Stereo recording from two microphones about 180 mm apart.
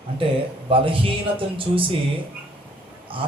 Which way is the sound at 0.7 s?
30° right (ahead or behind).